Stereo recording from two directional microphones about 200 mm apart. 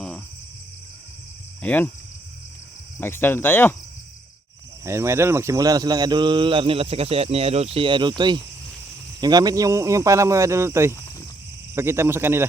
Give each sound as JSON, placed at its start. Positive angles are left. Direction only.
{"t": 1.6, "sound": "speech", "side_deg": 10}
{"t": 3.0, "sound": "speech", "side_deg": 10}
{"t": 4.9, "sound": "speech", "side_deg": -15}